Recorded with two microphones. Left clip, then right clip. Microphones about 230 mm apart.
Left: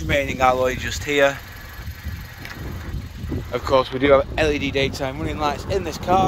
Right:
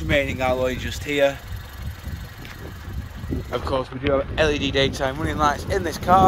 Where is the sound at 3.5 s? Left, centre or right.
Centre.